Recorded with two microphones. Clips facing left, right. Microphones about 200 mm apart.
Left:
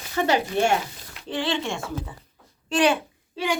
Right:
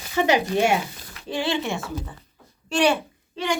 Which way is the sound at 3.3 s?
10° left (ahead or behind).